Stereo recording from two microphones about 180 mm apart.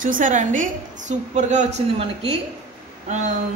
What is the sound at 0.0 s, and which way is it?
A man's voice, 45° right (ahead or behind).